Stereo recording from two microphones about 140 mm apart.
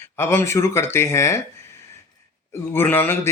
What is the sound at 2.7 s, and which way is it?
Speech, 15° left (ahead or behind).